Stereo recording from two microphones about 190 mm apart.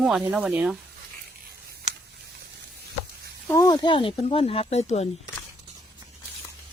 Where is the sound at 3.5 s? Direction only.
20° left (ahead or behind); by 5.2 s 35° left (ahead or behind).